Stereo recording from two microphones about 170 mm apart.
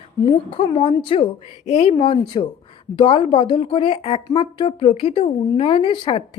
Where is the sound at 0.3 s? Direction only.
30° left (ahead or behind).